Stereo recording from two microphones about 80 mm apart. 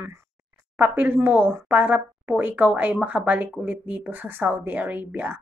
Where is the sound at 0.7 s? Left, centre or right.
Right.